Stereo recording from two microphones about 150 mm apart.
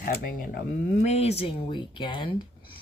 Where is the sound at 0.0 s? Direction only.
75° left (ahead or behind).